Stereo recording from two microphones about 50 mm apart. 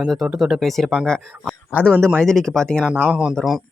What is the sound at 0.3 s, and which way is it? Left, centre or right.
Speech, centre.